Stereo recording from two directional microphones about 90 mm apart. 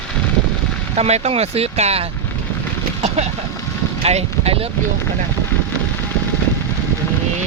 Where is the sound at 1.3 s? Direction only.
90° right.